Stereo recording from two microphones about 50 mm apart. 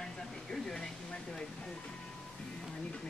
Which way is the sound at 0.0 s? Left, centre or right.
Centre.